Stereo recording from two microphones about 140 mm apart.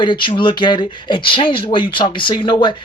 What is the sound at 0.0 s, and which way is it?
Speech, 35° left (ahead or behind).